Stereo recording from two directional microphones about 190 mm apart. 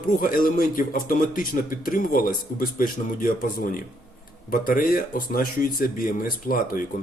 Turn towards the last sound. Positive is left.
turn(degrees=50)  # may be behind; listen again after turning